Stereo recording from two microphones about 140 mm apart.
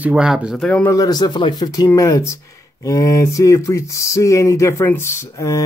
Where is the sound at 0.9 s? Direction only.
30° left (ahead or behind).